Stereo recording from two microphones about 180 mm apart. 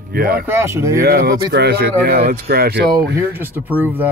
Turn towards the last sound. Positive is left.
turn(degrees=-10)  # may be behind; listen again after turning